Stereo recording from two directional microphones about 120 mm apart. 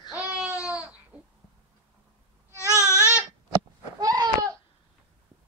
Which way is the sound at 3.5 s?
35° right (ahead or behind).